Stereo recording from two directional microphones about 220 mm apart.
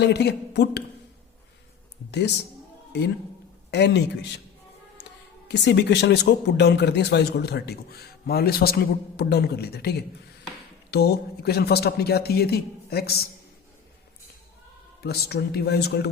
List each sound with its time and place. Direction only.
0.0 s speech: 50° left (ahead or behind)
2.0 s speech: 50° left (ahead or behind)
3.7 s speech: 50° left (ahead or behind)
5.5 s speech: 50° left (ahead or behind)
15.0 s speech: 45° left (ahead or behind)